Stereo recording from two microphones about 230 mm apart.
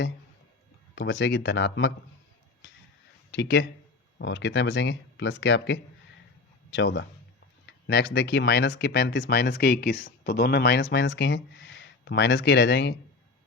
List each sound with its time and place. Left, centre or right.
0.9 s speech: left
3.3 s speech: left